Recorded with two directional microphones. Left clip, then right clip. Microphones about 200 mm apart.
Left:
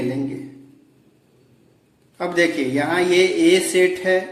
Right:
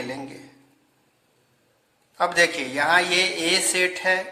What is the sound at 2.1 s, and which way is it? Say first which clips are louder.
A man's voice: left 1 dB; 30° right (ahead or behind).